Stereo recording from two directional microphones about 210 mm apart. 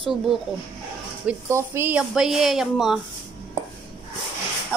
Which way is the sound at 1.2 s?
10° right (ahead or behind).